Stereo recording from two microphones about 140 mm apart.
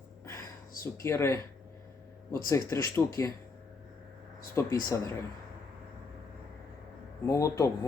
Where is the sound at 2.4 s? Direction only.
20° left (ahead or behind).